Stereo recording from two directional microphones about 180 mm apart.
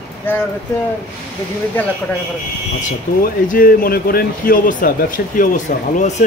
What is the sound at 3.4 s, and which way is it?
Speech, 50° left (ahead or behind).